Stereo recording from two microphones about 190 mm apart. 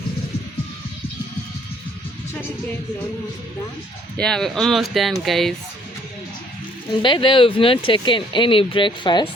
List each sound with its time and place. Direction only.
4.2 s speech: 5° left (ahead or behind)
7.0 s speech: 25° left (ahead or behind)